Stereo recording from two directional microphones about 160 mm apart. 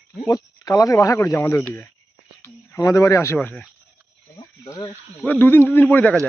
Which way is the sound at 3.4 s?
5° left (ahead or behind).